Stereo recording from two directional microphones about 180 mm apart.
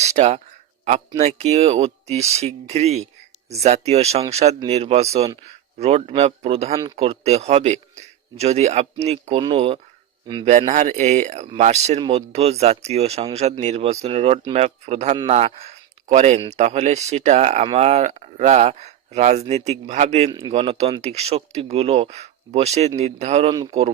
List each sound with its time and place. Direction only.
0.0 s speech: 40° right (ahead or behind)
10.7 s speech: 40° right (ahead or behind)